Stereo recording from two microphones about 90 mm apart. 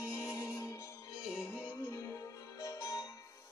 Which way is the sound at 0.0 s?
35° left (ahead or behind).